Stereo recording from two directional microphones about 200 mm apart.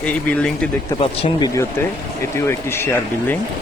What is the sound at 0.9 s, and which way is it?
Speech, 30° left (ahead or behind).